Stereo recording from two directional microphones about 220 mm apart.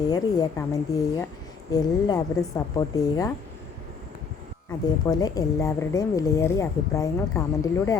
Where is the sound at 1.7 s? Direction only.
15° left (ahead or behind).